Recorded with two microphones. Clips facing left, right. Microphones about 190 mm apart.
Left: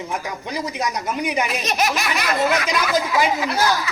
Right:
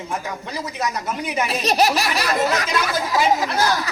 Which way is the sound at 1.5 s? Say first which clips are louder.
Right 3 dB; 35° right (ahead or behind).